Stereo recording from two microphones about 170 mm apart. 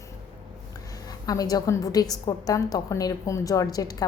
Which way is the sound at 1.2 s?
20° left (ahead or behind).